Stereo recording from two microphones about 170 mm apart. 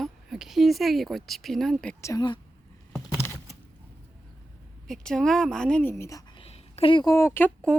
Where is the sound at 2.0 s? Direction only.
20° left (ahead or behind).